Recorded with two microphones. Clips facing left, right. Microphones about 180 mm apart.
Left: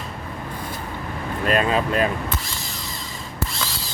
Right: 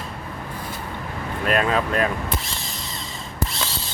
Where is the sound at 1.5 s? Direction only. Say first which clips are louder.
Left 1 dB; centre (ahead or behind).